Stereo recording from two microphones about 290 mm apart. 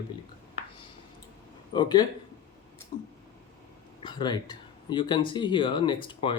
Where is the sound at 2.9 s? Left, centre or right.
Left.